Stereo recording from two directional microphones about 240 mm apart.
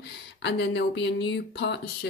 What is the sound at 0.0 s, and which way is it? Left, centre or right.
Speech, left.